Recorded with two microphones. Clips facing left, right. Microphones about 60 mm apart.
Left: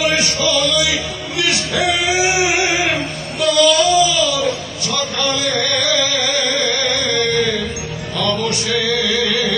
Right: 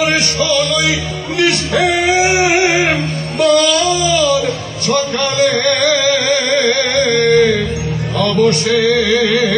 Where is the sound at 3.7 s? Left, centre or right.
Right.